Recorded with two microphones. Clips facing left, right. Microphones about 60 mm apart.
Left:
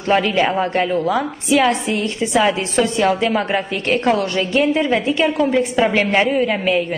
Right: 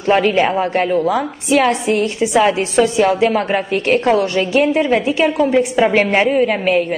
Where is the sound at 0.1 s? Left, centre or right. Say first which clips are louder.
Right 3 dB; centre.